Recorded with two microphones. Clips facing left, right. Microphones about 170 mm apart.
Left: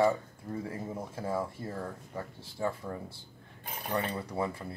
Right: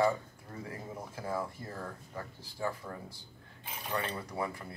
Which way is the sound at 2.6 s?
25° left (ahead or behind).